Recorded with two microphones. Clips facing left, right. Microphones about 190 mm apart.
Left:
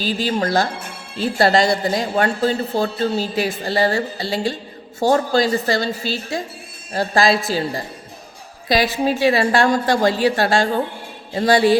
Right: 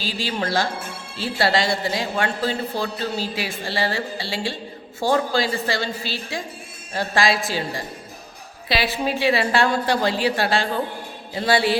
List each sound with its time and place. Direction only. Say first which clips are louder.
0.0 s a woman's voice: left 6 dB; 45° left (ahead or behind)
8.7 s speech: left 5 dB; 45° left (ahead or behind)